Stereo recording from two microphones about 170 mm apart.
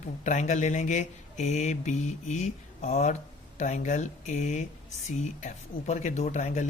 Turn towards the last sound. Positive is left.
turn(degrees=45)  # may be behind; listen again after turning